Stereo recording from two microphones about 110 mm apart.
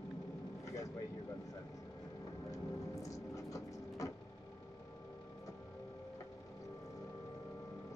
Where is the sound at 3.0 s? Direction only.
30° left (ahead or behind).